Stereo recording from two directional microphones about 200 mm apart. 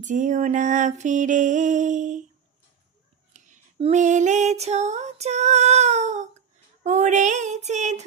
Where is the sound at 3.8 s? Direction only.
35° right (ahead or behind).